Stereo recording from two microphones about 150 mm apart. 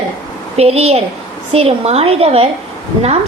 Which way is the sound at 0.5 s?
45° right (ahead or behind).